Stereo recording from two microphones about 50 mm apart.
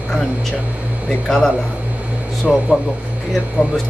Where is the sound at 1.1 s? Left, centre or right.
Centre.